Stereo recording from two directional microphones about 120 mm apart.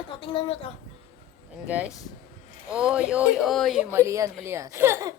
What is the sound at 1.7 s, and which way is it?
Speech, 10° right (ahead or behind).